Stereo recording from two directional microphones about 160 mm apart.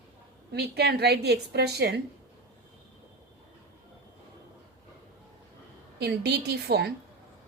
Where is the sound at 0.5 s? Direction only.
85° right.